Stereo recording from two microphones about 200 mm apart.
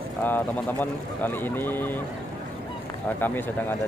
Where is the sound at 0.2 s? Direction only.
10° left (ahead or behind).